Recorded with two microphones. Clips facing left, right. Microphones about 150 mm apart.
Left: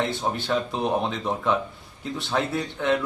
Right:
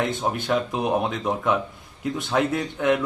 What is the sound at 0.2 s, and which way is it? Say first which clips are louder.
Speech: right 2 dB; 15° right (ahead or behind).